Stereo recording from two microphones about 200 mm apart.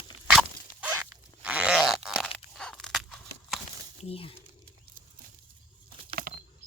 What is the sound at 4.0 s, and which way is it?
Speech, 30° left (ahead or behind).